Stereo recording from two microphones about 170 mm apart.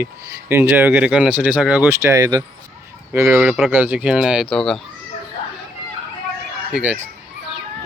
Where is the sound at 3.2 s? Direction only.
Centre (ahead or behind).